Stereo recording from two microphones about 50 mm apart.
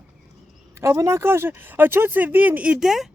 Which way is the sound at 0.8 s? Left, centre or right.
Right.